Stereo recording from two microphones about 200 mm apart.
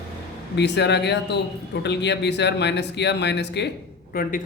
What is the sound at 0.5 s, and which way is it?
Speech, 60° left (ahead or behind).